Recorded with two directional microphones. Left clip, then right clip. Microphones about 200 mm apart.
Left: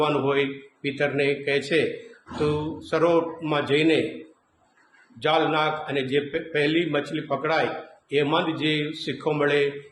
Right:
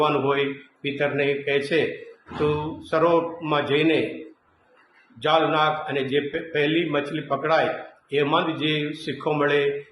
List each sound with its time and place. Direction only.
0.0 s a man's voice: 15° left (ahead or behind)
2.9 s a man's voice: 15° left (ahead or behind)
5.2 s a man's voice: 15° left (ahead or behind)